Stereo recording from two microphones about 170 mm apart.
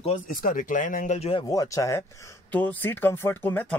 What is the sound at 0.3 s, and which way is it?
Speech, 55° left (ahead or behind).